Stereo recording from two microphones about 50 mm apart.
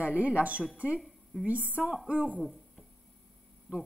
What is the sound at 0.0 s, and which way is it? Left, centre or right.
A woman's voice, right.